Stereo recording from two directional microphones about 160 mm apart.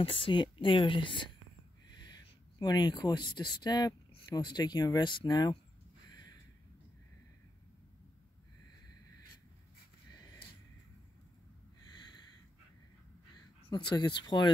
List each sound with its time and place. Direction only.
0.0 s a woman's voice: 35° left (ahead or behind)
11.8 s a sound: 25° left (ahead or behind)
13.7 s speech: 30° left (ahead or behind)